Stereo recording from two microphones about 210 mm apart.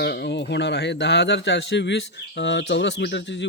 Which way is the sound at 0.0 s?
50° left (ahead or behind).